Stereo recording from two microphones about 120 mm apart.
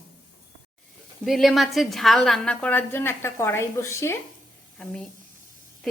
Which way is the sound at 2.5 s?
15° left (ahead or behind).